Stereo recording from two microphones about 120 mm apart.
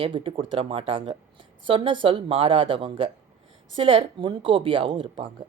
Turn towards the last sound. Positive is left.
turn(degrees=-45)  # may be behind; listen again after turning